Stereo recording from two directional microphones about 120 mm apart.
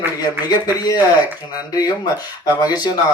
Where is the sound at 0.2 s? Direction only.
35° left (ahead or behind).